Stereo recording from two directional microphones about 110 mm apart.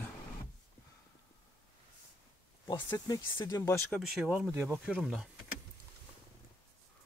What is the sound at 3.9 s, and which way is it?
Speech, 5° right (ahead or behind).